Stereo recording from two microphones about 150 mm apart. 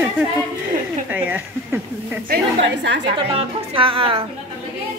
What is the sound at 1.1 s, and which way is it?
Speech, 10° right (ahead or behind).